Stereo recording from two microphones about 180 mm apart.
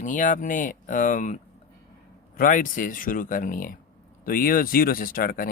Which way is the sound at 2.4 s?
50° left (ahead or behind).